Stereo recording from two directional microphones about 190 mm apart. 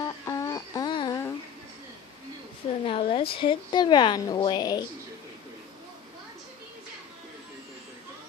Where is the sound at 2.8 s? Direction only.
30° left (ahead or behind).